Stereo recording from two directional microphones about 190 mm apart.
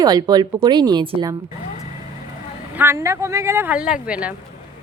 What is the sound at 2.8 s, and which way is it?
Speech, 15° right (ahead or behind).